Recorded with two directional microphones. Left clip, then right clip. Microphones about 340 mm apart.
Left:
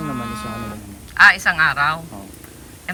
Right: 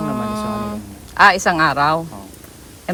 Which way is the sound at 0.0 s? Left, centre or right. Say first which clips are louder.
Right 4 dB; centre.